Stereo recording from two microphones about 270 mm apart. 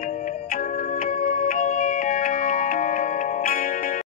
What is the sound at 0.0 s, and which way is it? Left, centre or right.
Music, left.